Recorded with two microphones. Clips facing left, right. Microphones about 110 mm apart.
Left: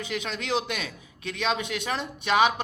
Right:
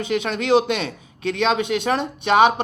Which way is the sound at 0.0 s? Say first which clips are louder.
Right 9 dB; 60° right (ahead or behind).